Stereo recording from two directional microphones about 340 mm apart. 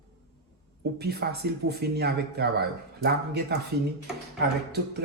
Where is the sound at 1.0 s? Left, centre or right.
Right.